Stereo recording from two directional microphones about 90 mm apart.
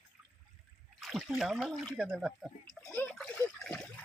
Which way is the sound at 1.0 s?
Centre (ahead or behind).